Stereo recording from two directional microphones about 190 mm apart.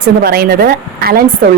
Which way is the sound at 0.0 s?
50° right (ahead or behind).